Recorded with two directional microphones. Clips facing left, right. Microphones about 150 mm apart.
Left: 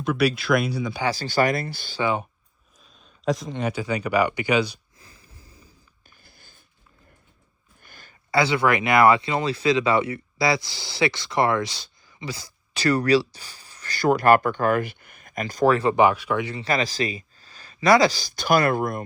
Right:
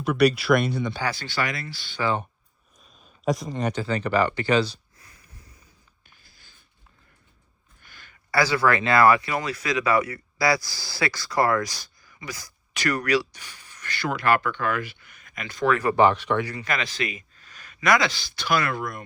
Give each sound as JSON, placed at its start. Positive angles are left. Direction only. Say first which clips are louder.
{"t": 0.0, "sound": "speech", "louder": "right 2 dB", "side_deg": 0}
{"t": 1.1, "sound": "speech", "louder": "left 7 dB", "side_deg": 40}
{"t": 2.0, "sound": "speech", "louder": "left 1 dB", "side_deg": 15}
{"t": 3.2, "sound": "speech", "louder": "even", "side_deg": 0}
{"t": 4.9, "sound": "wheeze", "louder": "left 2 dB", "side_deg": 30}
{"t": 6.2, "sound": "a sound", "louder": "left 6 dB", "side_deg": 50}
{"t": 7.8, "sound": "a sound", "louder": "left 2 dB", "side_deg": 45}
{"t": 8.3, "sound": "speech", "louder": "left 1 dB", "side_deg": 20}
{"t": 16.0, "sound": "speech", "louder": "even", "side_deg": 10}
{"t": 16.4, "sound": "speech", "louder": "left 3 dB", "side_deg": 25}